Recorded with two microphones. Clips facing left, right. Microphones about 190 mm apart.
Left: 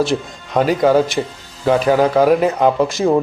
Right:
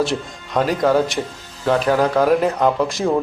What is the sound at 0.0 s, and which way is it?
A man's voice, centre (ahead or behind).